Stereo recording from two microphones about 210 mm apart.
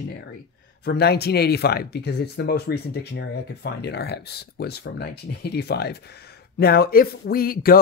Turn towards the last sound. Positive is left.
turn(degrees=45)  # may be behind; listen again after turning